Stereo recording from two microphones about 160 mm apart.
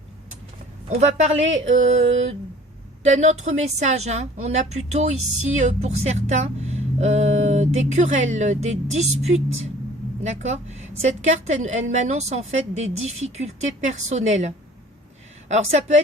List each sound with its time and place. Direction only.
0.9 s a woman's voice: 45° right (ahead or behind)
10.2 s a woman's voice: 45° right (ahead or behind)